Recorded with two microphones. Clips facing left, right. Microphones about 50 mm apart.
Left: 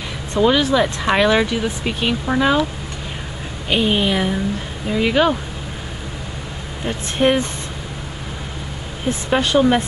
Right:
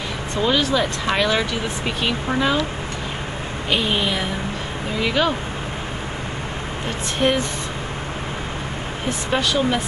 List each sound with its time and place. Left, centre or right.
0.4 s speech: centre
2.0 s a woman's voice: centre
3.7 s a woman's voice: centre
7.2 s a woman's voice: centre
9.4 s speech: left